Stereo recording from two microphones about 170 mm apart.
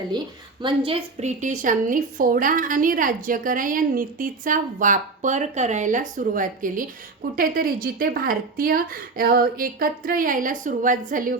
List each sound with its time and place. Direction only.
0.9 s a woman's voice: 35° right (ahead or behind); by 11.3 s 55° right (ahead or behind)